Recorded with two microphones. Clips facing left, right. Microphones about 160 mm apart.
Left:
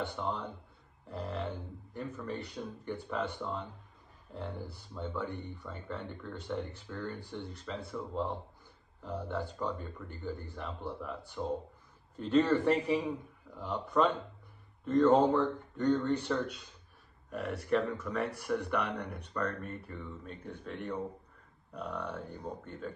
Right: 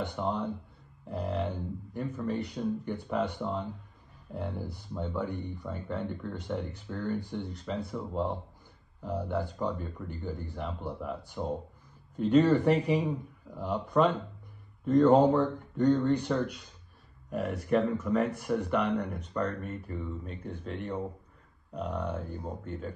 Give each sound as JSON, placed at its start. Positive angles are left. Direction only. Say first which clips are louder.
{"t": 0.0, "sound": "speech", "louder": "right 4 dB", "side_deg": -15}
{"t": 17.3, "sound": "speech", "louder": "right 3 dB", "side_deg": 0}